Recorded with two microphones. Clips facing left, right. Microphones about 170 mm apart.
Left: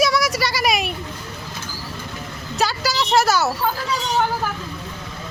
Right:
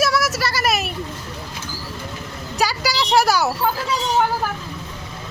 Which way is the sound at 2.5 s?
10° right (ahead or behind).